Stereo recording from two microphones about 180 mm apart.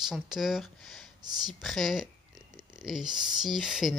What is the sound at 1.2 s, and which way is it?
Speech, 25° right (ahead or behind).